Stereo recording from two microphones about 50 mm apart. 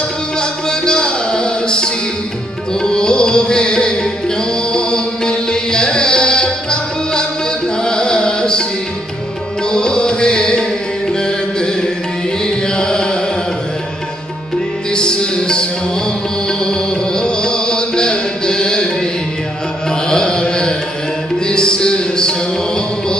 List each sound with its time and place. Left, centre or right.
0.4 s music: centre
9.7 s music: centre
14.9 s music: centre
19.9 s music: centre